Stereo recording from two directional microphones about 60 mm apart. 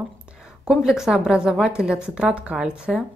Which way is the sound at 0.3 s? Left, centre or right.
Centre.